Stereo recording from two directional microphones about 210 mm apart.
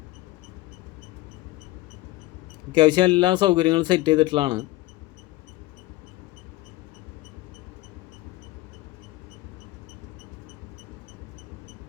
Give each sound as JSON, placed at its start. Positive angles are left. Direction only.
{"t": 2.7, "sound": "speech", "side_deg": -20}